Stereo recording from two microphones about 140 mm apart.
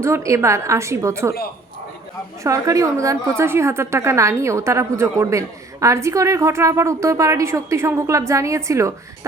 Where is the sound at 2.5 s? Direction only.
25° right (ahead or behind).